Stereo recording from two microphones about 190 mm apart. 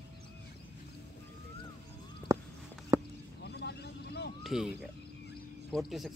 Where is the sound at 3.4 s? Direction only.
60° left (ahead or behind).